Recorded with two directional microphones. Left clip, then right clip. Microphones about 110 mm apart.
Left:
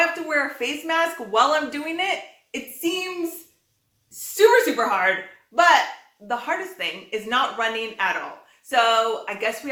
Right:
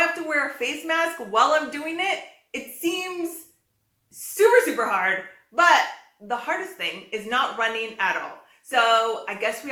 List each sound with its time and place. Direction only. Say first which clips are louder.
0.3 s a woman's voice: left 1 dB; 20° left (ahead or behind)
2.5 s a sound: left 1 dB; 25° left (ahead or behind)
4.4 s speech: left 1 dB; 30° left (ahead or behind)
5.5 s a woman's voice: left 1 dB; 25° left (ahead or behind)